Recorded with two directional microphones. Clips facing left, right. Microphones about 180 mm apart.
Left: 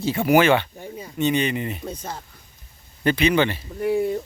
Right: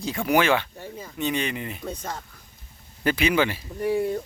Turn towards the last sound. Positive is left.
turn(degrees=5)  # may be behind; listen again after turning